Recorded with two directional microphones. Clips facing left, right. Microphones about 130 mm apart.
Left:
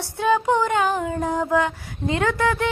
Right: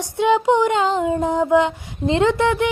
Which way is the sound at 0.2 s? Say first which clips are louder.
Right 4 dB; 20° right (ahead or behind).